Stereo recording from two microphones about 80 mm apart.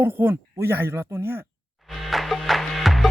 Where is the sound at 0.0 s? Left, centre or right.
Right.